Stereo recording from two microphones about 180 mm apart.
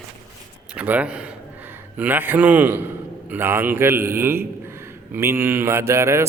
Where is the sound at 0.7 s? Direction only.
10° right (ahead or behind).